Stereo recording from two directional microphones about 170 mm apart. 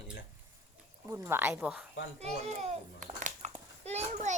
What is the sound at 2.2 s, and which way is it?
A child's voice, 40° right (ahead or behind).